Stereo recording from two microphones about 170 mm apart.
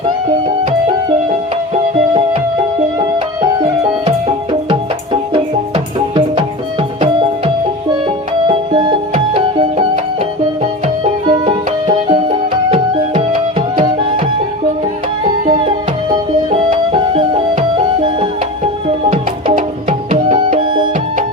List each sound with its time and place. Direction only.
1.7 s music: 40° right (ahead or behind)
5.3 s music: 30° right (ahead or behind)
15.4 s music: 30° right (ahead or behind)
20.1 s tabla: 35° right (ahead or behind)
20.6 s music: 30° right (ahead or behind)